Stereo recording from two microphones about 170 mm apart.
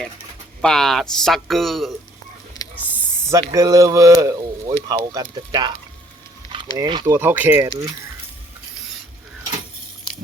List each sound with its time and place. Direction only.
0.6 s speech: centre (ahead or behind)
3.2 s speech: 20° right (ahead or behind)
6.5 s a sound: 25° right (ahead or behind)
7.0 s speech: 15° right (ahead or behind)